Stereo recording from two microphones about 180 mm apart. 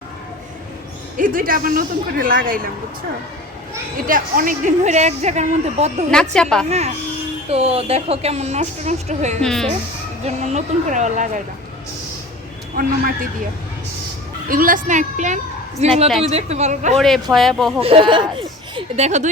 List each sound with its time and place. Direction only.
1.1 s a man's voice: 50° right (ahead or behind)
4.0 s speech: 50° right (ahead or behind)
6.1 s a woman's voice: 5° left (ahead or behind)
6.7 s speech: 35° right (ahead or behind)
9.4 s a woman's voice: 5° left (ahead or behind)
10.2 s speech: 40° right (ahead or behind)
12.8 s a man's voice: 50° right (ahead or behind)
14.5 s a man's voice: 50° right (ahead or behind)
17.3 s a woman's voice: centre (ahead or behind)
17.7 s speech: 35° right (ahead or behind)